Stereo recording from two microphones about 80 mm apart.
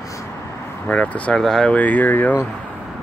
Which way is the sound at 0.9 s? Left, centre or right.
Centre.